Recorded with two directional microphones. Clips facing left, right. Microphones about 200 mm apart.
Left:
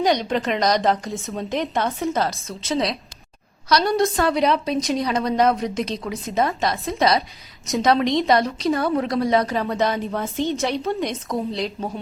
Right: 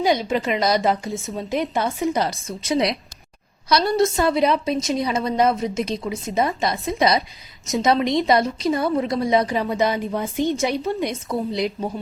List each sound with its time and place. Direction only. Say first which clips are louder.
0.0 s a woman's voice: even; 5° right (ahead or behind)